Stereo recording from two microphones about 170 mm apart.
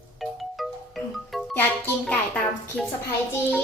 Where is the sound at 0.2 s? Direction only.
Centre (ahead or behind).